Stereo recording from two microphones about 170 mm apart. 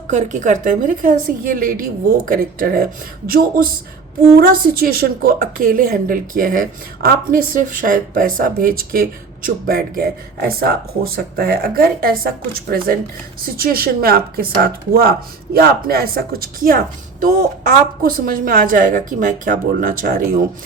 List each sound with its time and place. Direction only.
0.1 s a woman's voice: 45° right (ahead or behind)